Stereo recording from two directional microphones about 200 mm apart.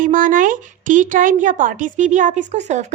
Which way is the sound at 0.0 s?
40° right (ahead or behind).